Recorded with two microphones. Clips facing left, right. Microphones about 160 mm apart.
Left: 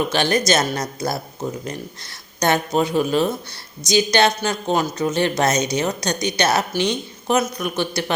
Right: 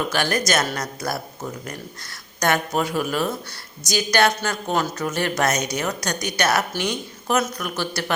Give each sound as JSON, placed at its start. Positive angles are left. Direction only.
{"t": 0.1, "sound": "a woman's voice", "side_deg": 20}